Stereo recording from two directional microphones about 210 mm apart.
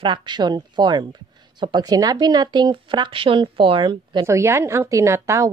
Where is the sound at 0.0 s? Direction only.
20° right (ahead or behind).